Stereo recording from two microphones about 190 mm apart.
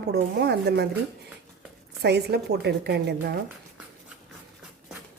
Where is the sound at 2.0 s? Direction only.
60° right (ahead or behind).